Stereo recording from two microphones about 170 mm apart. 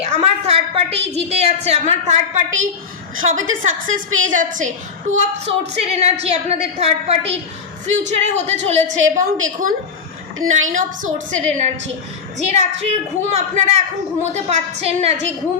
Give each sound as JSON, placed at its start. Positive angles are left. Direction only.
{"t": 0.0, "sound": "a woman's voice", "side_deg": -40}
{"t": 10.7, "sound": "a woman's voice", "side_deg": -50}